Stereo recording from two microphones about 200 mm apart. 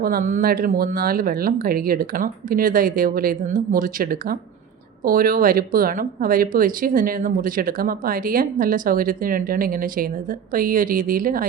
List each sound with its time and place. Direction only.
0.0 s speech: 45° right (ahead or behind)